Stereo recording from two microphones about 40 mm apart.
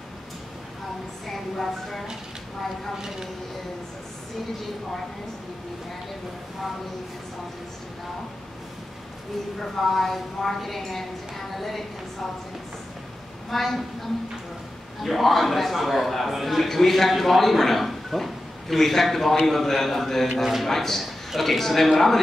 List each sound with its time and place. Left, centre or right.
1.2 s a woman's voice: centre
9.6 s speech: centre
13.5 s speech: centre
15.0 s a man's voice: centre